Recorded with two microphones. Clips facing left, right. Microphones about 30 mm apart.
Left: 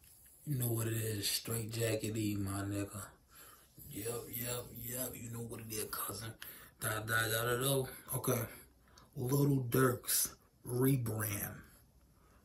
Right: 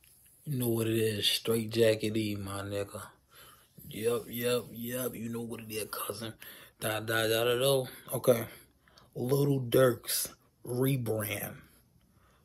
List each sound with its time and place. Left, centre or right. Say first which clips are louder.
0.4 s speech: right 8 dB; right
5.7 s speech: right 5 dB; right
5.9 s speech: right 6 dB; right